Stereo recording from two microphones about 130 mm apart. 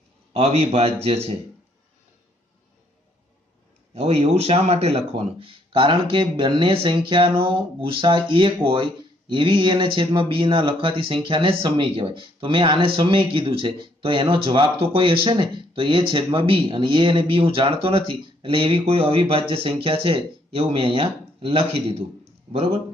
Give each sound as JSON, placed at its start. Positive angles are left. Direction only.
{"t": 0.3, "sound": "speech", "side_deg": -50}
{"t": 3.9, "sound": "speech", "side_deg": -50}